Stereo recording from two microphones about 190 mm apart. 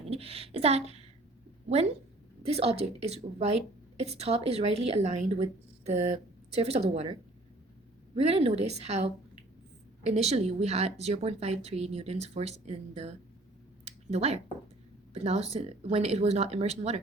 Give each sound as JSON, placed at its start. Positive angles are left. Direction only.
{"t": 0.0, "sound": "a woman's voice", "side_deg": -30}
{"t": 2.4, "sound": "a woman's voice", "side_deg": -30}
{"t": 13.8, "sound": "a sound", "side_deg": -35}
{"t": 15.1, "sound": "a woman's voice", "side_deg": -35}